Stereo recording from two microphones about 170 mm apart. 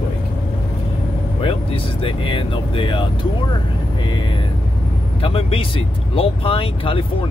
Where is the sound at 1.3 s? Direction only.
30° left (ahead or behind).